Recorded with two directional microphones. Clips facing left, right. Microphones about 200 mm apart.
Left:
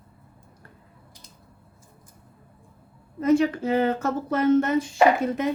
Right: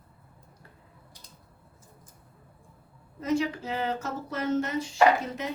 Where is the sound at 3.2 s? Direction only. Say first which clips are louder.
Left 8 dB; 55° left (ahead or behind).